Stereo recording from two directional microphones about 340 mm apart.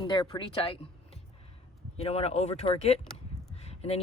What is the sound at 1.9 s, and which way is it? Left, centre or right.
Speech, centre.